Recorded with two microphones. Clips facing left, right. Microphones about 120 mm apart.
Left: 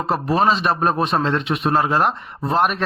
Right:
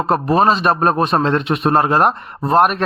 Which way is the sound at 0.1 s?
50° right (ahead or behind).